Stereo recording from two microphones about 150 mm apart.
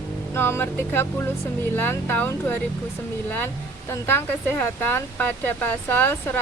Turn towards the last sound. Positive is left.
turn(degrees=10)  # may be behind; listen again after turning